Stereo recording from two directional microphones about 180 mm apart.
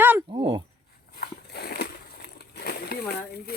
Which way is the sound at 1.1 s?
60° left (ahead or behind).